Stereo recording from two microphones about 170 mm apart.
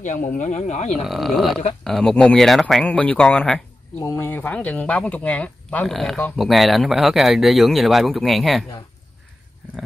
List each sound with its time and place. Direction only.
0.0 s speech: 50° left (ahead or behind)
1.0 s speech: centre (ahead or behind)
4.0 s speech: 15° left (ahead or behind); by 8.6 s centre (ahead or behind)